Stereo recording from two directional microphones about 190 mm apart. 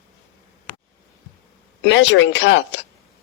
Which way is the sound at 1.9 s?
70° left (ahead or behind).